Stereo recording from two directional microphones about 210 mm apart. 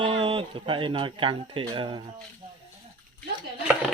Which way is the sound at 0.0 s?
25° right (ahead or behind).